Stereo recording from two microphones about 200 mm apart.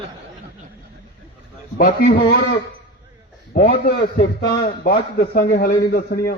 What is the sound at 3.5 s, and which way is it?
A man's voice, 45° left (ahead or behind).